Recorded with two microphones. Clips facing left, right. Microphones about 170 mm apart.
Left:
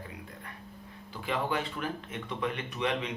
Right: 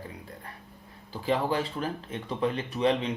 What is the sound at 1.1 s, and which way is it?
Speech, 35° right (ahead or behind).